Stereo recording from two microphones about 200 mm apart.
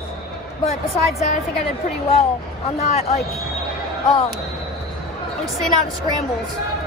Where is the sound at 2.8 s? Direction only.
30° left (ahead or behind).